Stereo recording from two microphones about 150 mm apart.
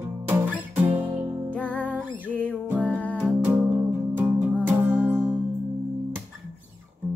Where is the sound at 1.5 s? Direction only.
10° left (ahead or behind).